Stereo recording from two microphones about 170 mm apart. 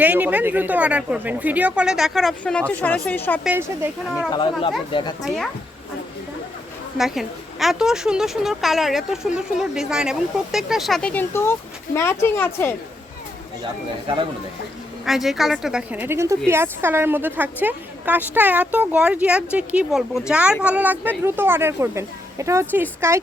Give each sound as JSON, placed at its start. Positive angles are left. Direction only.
{"t": 0.0, "sound": "a woman's voice", "side_deg": -10}
{"t": 3.4, "sound": "a woman's voice", "side_deg": -10}
{"t": 4.3, "sound": "speech", "side_deg": 30}
{"t": 7.0, "sound": "a woman's voice", "side_deg": 0}
{"t": 14.1, "sound": "speech", "side_deg": -30}
{"t": 15.0, "sound": "a woman's voice", "side_deg": 0}